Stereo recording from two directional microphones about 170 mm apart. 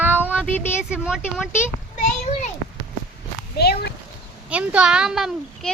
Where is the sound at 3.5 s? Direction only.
70° left (ahead or behind).